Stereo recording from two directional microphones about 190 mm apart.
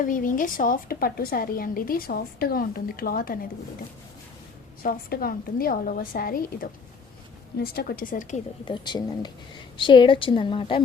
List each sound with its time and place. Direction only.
0.0 s a woman's voice: 45° left (ahead or behind)
4.8 s a woman's voice: 50° left (ahead or behind)
8.6 s a woman's voice: 25° left (ahead or behind)